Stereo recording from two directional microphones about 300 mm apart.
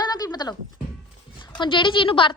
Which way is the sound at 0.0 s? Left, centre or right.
Centre.